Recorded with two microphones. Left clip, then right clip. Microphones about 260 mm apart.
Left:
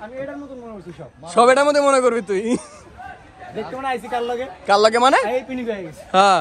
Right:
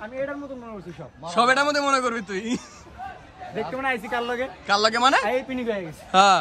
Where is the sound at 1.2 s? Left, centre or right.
Centre.